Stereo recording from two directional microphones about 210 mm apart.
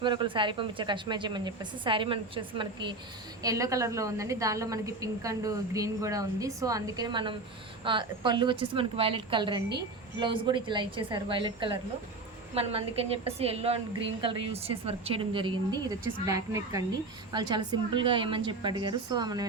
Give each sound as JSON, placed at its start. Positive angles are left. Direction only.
{"t": 0.0, "sound": "a woman's voice", "side_deg": -20}